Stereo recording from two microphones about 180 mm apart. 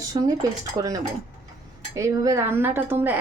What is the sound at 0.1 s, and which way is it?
Dishes, 25° right (ahead or behind).